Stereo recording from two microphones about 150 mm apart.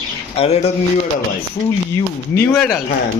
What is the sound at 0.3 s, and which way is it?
Speech, 45° left (ahead or behind).